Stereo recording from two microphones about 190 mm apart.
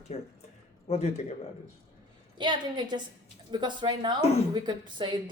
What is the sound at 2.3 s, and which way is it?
A woman's voice, 25° right (ahead or behind).